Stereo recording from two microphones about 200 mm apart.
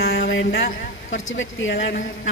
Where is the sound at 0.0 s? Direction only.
60° left (ahead or behind).